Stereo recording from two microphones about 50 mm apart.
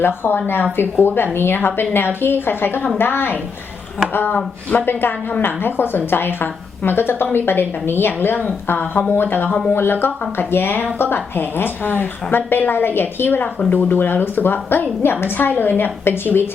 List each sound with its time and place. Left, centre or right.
0.0 s speech: left
8.8 s speech: left